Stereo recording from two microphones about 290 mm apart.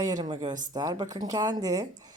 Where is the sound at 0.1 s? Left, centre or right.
Centre.